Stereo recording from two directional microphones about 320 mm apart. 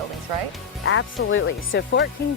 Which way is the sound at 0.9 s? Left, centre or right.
Left.